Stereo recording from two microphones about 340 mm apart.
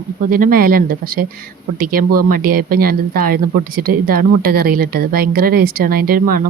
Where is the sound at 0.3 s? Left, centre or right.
Right.